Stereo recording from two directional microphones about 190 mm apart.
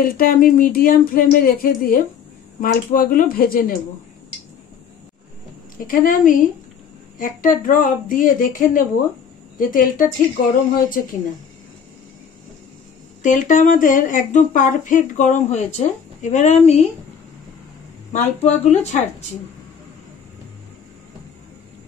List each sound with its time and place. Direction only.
0.0 s speech: 50° left (ahead or behind)
5.8 s speech: 45° left (ahead or behind)
13.2 s speech: 40° left (ahead or behind)
18.1 s speech: 35° left (ahead or behind)